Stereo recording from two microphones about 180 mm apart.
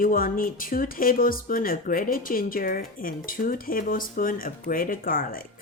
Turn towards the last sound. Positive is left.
turn(degrees=50)  # may be behind; listen again after turning